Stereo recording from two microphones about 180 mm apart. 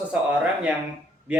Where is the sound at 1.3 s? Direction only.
10° right (ahead or behind).